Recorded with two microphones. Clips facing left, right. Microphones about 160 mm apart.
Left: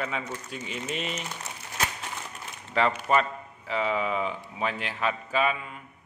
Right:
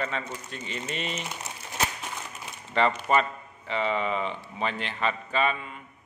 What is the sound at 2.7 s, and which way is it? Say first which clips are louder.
A man's voice: even; centre (ahead or behind).